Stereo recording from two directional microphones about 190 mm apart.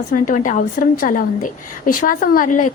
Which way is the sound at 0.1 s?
45° left (ahead or behind).